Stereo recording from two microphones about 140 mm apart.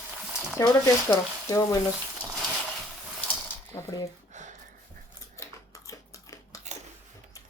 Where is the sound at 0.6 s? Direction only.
20° left (ahead or behind).